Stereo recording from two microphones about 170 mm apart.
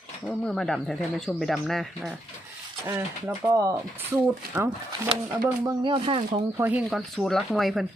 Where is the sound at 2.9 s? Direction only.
10° right (ahead or behind).